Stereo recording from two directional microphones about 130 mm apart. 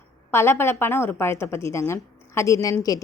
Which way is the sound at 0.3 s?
20° left (ahead or behind).